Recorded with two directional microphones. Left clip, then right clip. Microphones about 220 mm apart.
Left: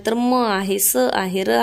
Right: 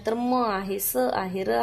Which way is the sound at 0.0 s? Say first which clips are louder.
Left 6 dB; 40° left (ahead or behind).